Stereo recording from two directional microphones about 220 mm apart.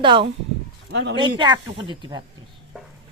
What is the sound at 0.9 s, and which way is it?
Speech, 55° right (ahead or behind).